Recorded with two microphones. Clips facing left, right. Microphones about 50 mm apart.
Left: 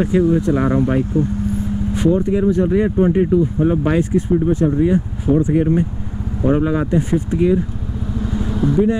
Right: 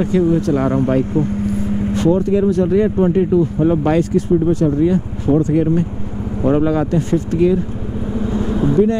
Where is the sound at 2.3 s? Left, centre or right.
Centre.